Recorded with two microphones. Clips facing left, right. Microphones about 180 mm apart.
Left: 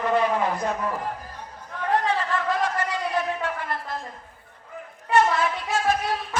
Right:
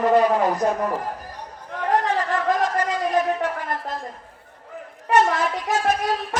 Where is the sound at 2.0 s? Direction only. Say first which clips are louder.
Right 3 dB; 40° right (ahead or behind).